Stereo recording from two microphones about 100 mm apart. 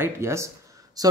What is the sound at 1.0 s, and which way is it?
Speech, 40° right (ahead or behind).